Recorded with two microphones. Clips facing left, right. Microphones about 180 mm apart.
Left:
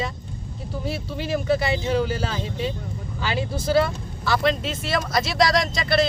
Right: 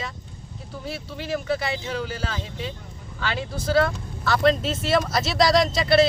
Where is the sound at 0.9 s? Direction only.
20° left (ahead or behind).